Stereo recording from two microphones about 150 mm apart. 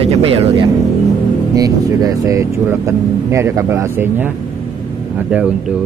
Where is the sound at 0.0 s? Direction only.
40° right (ahead or behind).